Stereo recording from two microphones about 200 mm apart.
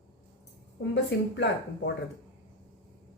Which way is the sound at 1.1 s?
55° left (ahead or behind).